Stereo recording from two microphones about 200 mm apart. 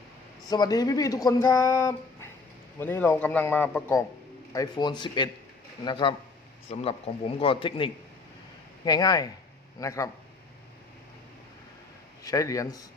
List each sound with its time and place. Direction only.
0.4 s speech: 20° left (ahead or behind)
12.2 s speech: 15° left (ahead or behind)